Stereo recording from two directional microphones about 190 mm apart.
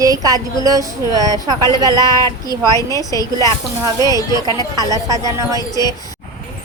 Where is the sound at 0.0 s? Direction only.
20° right (ahead or behind).